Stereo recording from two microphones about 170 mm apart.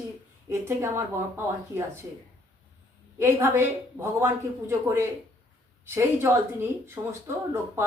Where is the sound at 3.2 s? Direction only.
15° right (ahead or behind).